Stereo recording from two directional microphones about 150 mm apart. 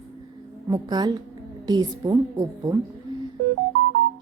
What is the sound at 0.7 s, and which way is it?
Speech, 25° right (ahead or behind).